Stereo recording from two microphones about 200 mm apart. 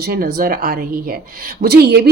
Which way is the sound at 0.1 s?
50° right (ahead or behind).